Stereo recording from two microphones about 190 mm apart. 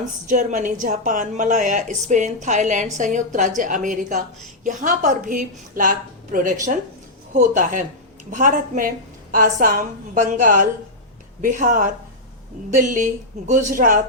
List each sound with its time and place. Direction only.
0.0 s a woman's voice: 40° right (ahead or behind)